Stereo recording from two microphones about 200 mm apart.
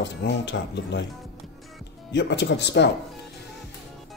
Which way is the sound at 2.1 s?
60° left (ahead or behind).